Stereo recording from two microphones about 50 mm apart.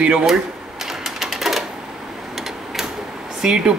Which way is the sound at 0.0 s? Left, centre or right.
Centre.